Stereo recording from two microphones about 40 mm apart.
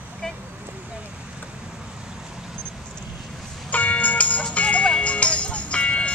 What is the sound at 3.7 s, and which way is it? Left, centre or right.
Music, left.